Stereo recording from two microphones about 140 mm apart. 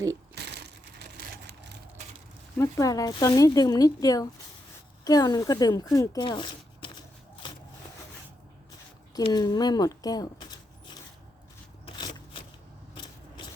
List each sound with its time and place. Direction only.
2.6 s speech: 25° left (ahead or behind)
9.3 s speech: 30° left (ahead or behind)
11.9 s a sound: 35° left (ahead or behind)